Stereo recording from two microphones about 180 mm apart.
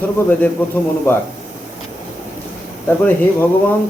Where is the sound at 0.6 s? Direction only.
10° left (ahead or behind).